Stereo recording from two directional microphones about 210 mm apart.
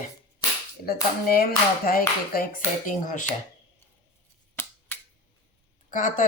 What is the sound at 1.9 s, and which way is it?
Speech, 45° left (ahead or behind).